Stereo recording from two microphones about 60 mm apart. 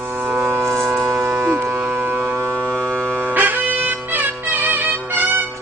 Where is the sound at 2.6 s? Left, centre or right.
Centre.